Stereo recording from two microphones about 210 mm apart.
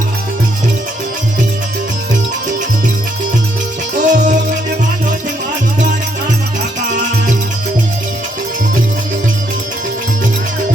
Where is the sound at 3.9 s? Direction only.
35° right (ahead or behind).